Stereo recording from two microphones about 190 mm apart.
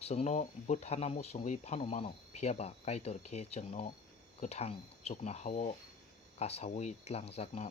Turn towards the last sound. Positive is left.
turn(degrees=35)  # may be behind; listen again after turning